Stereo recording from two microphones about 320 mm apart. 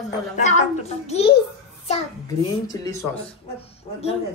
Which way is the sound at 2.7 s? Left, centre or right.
Centre.